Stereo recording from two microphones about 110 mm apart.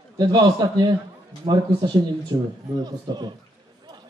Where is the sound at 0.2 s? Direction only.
40° right (ahead or behind).